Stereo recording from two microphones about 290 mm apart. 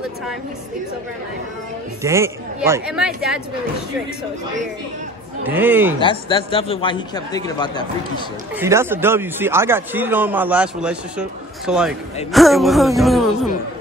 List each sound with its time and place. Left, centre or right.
2.0 s speech: centre
5.5 s a man's voice: centre
5.9 s a man's voice: centre
8.5 s a man's voice: centre